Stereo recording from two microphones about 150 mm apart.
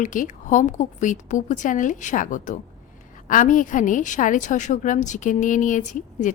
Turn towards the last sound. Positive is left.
turn(degrees=55)  # may be behind; listen again after turning